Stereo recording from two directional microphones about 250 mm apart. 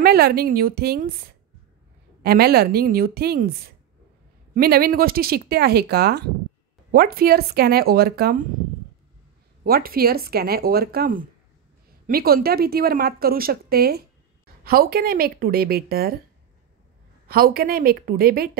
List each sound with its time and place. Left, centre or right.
0.0 s a woman's voice: right
2.2 s a woman's voice: right
4.6 s a woman's voice: right
9.7 s a woman's voice: right
17.3 s a woman's voice: right